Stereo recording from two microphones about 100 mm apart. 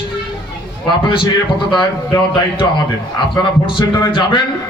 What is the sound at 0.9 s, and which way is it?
A man's voice, 55° left (ahead or behind).